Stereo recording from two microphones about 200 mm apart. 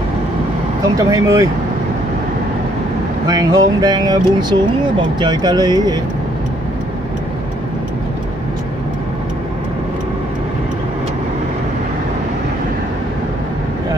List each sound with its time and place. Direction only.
0.9 s speech: 15° right (ahead or behind)
3.3 s speech: 20° right (ahead or behind)